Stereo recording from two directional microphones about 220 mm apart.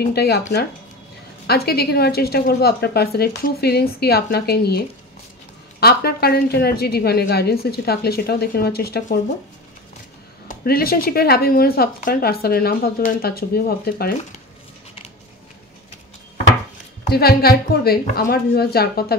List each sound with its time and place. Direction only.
0.0 s speech: 45° left (ahead or behind)
10.5 s speech: 45° left (ahead or behind)
17.1 s speech: 45° left (ahead or behind)